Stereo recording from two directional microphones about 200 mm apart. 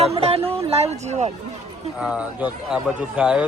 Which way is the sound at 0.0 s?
30° right (ahead or behind).